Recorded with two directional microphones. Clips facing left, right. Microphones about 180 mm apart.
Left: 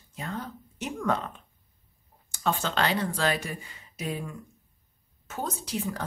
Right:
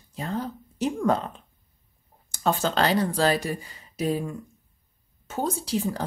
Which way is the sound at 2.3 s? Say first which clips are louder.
Right 4 dB; 40° right (ahead or behind).